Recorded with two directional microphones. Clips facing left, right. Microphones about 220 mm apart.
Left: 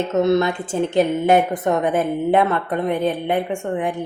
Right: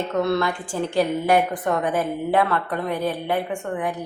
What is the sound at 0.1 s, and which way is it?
A woman's voice, 20° left (ahead or behind).